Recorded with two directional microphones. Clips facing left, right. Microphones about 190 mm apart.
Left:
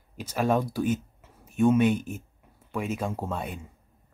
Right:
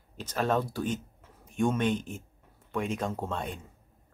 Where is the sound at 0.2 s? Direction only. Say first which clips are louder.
Left 3 dB; 10° left (ahead or behind).